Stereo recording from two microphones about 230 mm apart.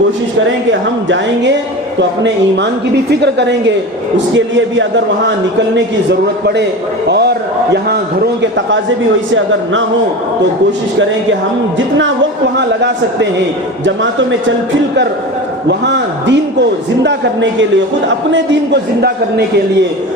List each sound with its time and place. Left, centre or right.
0.7 s a woman's voice: right
5.7 s a woman's voice: right
8.4 s a woman's voice: right
11.9 s a woman's voice: right
15.9 s a woman's voice: right